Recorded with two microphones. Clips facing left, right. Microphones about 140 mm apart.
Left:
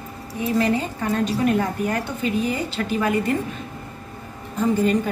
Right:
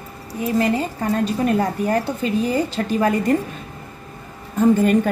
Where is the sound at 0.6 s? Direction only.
35° right (ahead or behind).